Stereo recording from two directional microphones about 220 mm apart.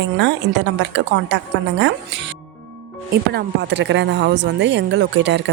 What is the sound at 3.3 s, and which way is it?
A woman's voice, 50° right (ahead or behind).